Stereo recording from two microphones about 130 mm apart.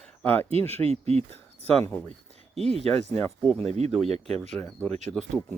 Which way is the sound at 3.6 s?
60° right (ahead or behind).